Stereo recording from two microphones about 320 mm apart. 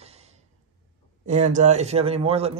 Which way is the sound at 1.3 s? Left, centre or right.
Right.